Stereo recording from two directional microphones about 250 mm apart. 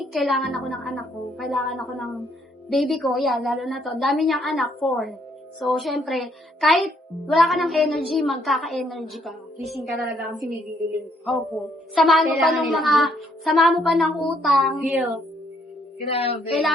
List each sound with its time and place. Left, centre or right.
0.0 s a child's voice: centre
12.0 s a child's voice: centre
16.0 s speech: left